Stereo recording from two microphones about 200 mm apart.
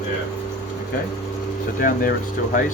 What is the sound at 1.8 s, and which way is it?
Speech, 45° left (ahead or behind).